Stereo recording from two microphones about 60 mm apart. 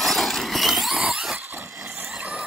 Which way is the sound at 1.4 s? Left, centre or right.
Right.